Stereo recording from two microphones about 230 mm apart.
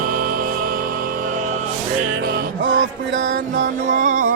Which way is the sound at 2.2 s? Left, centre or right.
Right.